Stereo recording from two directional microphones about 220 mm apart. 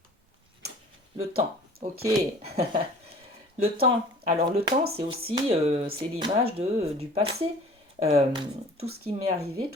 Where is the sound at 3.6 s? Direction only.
45° right (ahead or behind).